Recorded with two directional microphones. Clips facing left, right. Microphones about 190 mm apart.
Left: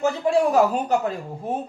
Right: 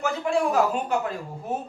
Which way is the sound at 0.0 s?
40° left (ahead or behind).